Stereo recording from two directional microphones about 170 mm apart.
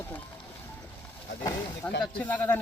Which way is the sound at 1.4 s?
10° left (ahead or behind).